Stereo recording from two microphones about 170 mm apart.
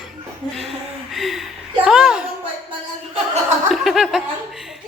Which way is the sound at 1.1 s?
Centre (ahead or behind).